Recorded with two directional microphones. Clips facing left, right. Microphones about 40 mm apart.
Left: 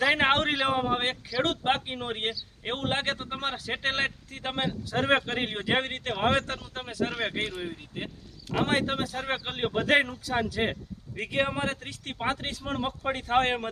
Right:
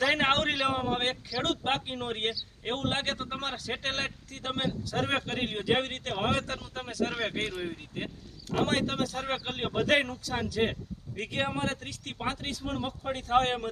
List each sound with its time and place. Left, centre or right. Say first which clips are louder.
0.0 s speech: left 2 dB; centre; by 6.4 s left
6.8 s speech: left 1 dB; left
7.2 s speech: left 1 dB; centre
8.5 s speech: left 2 dB; left
9.6 s speech: left 3 dB; centre; by 13.7 s left